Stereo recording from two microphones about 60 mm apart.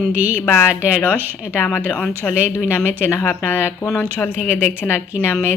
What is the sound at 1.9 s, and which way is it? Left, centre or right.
Speech, centre.